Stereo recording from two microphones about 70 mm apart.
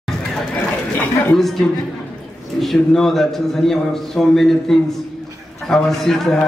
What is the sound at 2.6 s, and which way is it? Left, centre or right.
A man's voice, centre.